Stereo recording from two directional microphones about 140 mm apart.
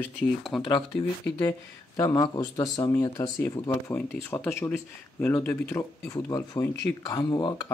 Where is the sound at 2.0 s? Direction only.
25° left (ahead or behind); by 5.8 s 10° left (ahead or behind).